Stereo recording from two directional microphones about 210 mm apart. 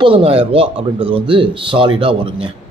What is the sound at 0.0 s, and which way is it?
Speech, 25° right (ahead or behind).